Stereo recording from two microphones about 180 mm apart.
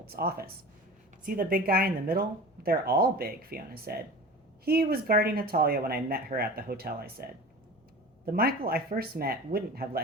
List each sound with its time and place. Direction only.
0.0 s speech: 60° right (ahead or behind)